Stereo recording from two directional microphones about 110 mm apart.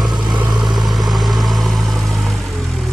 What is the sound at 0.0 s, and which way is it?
Vehicle, centre (ahead or behind).